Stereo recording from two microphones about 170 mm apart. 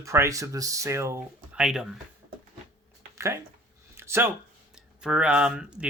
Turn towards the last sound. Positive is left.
turn(degrees=-5)  # may be behind; listen again after turning